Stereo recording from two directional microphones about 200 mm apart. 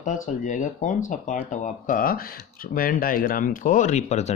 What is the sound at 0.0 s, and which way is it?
Speech, 40° left (ahead or behind).